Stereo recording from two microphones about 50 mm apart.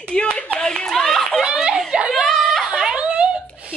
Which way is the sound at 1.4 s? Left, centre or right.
Centre.